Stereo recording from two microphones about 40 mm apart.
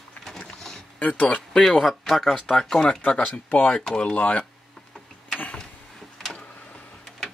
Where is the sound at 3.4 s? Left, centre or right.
Left.